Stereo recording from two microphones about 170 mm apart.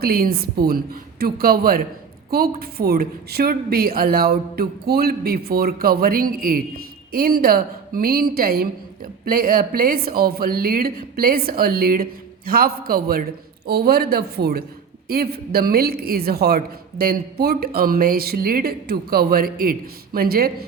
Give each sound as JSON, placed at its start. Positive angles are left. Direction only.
{"t": 0.0, "sound": "a woman's voice", "side_deg": -60}